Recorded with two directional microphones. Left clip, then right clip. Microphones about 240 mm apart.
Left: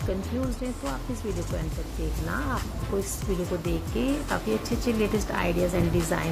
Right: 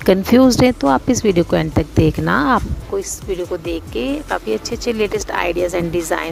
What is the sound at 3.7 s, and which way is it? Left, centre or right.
Speech, right.